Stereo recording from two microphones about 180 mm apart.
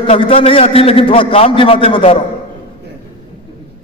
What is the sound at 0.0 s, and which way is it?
A man's voice, 30° left (ahead or behind).